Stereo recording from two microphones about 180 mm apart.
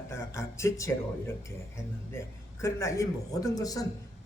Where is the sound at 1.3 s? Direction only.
15° left (ahead or behind).